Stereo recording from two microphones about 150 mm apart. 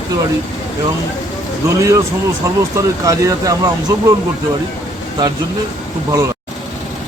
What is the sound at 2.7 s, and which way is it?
Speech, 20° right (ahead or behind).